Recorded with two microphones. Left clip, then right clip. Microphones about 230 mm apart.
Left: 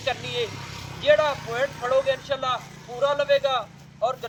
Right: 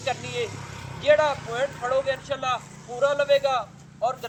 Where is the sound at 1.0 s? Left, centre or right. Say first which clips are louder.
Even; left.